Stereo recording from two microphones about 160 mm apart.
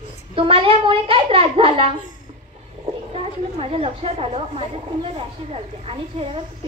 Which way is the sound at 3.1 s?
40° right (ahead or behind).